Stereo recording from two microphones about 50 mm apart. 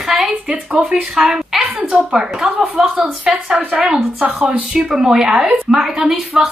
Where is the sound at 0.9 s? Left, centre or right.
Centre.